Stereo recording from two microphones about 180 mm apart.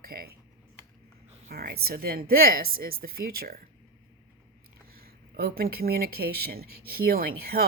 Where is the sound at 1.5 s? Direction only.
60° right (ahead or behind).